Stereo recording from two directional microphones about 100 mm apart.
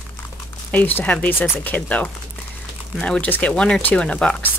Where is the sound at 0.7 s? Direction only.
15° left (ahead or behind).